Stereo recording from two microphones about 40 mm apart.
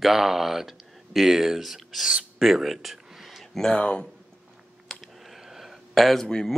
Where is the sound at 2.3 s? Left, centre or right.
Centre.